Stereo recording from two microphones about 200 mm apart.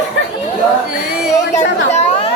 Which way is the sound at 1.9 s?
35° left (ahead or behind).